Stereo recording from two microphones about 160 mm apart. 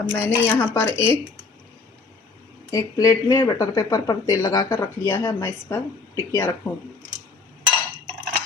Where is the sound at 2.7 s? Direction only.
20° left (ahead or behind).